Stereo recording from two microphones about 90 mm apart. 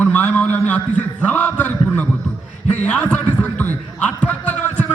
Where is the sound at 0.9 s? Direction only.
15° left (ahead or behind).